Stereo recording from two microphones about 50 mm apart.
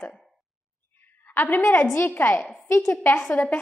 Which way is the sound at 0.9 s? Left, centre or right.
Left.